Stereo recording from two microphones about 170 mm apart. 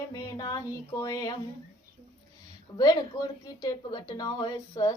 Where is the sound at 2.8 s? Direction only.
20° left (ahead or behind).